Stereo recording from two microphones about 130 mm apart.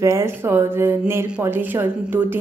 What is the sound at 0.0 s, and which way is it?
A woman's voice, 20° right (ahead or behind).